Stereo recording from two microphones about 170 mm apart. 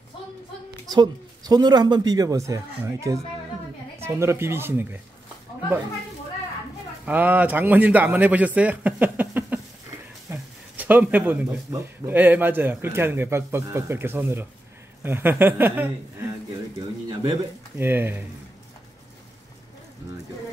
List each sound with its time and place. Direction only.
0.8 s a man's voice: 25° right (ahead or behind)
7.1 s a man's voice: 10° right (ahead or behind)
17.7 s speech: 15° right (ahead or behind)